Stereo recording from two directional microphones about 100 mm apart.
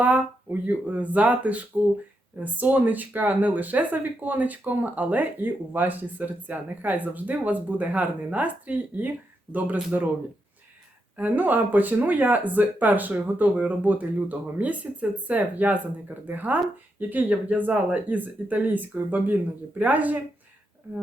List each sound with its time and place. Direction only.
0.0 s speech: 15° right (ahead or behind)
11.2 s speech: 15° right (ahead or behind)